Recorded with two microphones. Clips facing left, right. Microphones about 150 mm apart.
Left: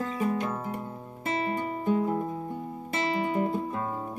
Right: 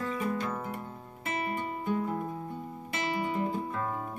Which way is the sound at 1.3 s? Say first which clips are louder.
Left 3 dB; 25° left (ahead or behind).